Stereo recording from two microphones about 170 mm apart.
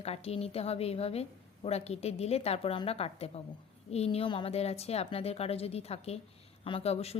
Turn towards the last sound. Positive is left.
turn(degrees=35)  # may be behind; listen again after turning